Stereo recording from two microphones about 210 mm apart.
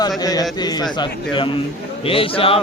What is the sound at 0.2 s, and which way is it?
Speech, 15° left (ahead or behind).